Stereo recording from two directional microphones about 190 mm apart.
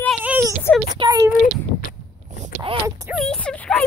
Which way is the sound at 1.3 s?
45° left (ahead or behind).